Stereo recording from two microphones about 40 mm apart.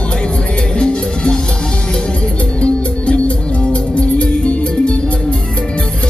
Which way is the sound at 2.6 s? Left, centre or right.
Left.